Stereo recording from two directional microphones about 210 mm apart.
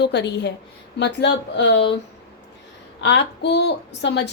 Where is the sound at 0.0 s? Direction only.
55° left (ahead or behind).